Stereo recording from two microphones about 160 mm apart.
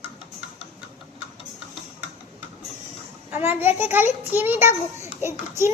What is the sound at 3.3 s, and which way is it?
A child's voice, 10° right (ahead or behind).